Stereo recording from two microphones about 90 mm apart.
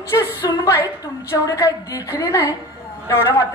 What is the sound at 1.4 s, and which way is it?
Speech, 40° left (ahead or behind).